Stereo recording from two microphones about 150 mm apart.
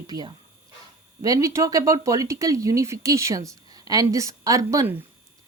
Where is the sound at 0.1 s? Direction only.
25° right (ahead or behind).